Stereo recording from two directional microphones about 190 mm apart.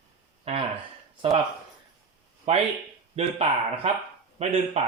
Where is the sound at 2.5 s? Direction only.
30° right (ahead or behind).